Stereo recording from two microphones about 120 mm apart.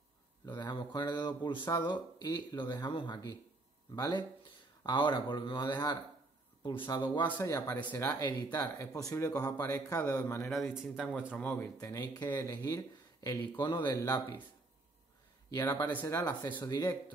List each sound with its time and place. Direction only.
0.5 s speech: 40° left (ahead or behind)
7.3 s speech: 25° left (ahead or behind)
10.5 s speech: 5° right (ahead or behind)
11.3 s speech: 10° left (ahead or behind)
11.8 s speech: 30° left (ahead or behind)
13.9 s speech: 30° left (ahead or behind)
15.9 s speech: 20° left (ahead or behind)